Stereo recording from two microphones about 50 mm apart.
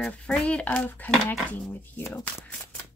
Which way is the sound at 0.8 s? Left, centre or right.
Left.